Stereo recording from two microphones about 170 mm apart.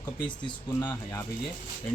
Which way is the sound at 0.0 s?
5° left (ahead or behind).